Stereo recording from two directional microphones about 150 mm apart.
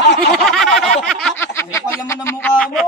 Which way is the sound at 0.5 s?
Centre (ahead or behind).